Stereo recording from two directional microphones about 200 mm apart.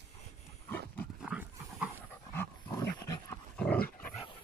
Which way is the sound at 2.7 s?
15° left (ahead or behind).